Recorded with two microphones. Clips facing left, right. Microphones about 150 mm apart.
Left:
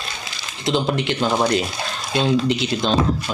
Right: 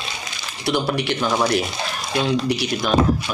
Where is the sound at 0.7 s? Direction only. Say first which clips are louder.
Left 1 dB; 20° left (ahead or behind).